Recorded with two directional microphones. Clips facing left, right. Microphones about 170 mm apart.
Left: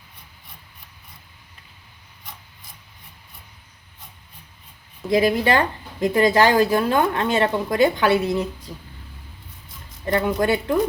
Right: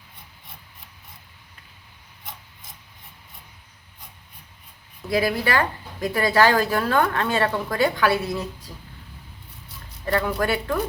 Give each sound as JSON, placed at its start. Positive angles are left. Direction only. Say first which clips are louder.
{"t": 5.0, "sound": "speech", "louder": "left 4 dB", "side_deg": 20}
{"t": 10.1, "sound": "speech", "louder": "left 3 dB", "side_deg": 20}